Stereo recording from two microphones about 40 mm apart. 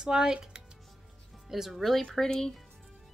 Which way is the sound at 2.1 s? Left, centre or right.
Centre.